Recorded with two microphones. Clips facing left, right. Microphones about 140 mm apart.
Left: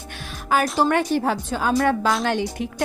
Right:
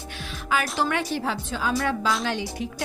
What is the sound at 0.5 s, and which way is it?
A woman's voice, 40° left (ahead or behind).